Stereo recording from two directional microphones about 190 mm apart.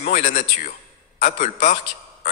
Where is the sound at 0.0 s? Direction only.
40° left (ahead or behind).